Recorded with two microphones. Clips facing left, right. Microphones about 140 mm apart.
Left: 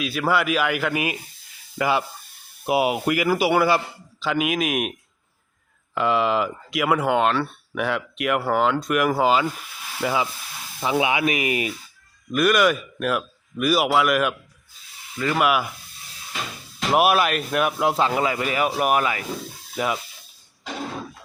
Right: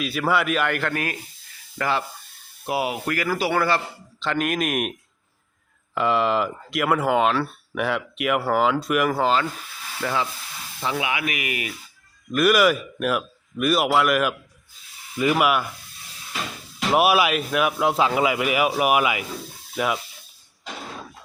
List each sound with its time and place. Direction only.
0.0 s speech: centre (ahead or behind); by 11.7 s 25° left (ahead or behind)
12.3 s speech: centre (ahead or behind)
15.2 s speech: 10° right (ahead or behind)
16.9 s speech: centre (ahead or behind)